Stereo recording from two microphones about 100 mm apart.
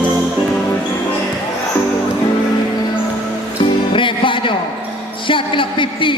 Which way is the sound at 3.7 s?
55° left (ahead or behind).